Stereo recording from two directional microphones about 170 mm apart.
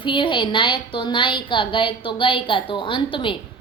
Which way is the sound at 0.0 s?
30° left (ahead or behind).